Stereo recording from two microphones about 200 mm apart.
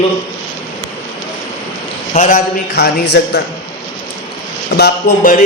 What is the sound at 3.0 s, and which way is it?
Speech, 55° left (ahead or behind).